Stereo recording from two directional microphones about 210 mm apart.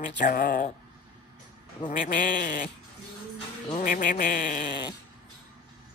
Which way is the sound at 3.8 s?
40° left (ahead or behind).